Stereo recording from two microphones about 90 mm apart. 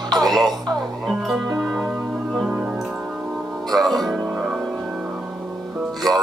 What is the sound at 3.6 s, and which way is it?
Music, centre (ahead or behind).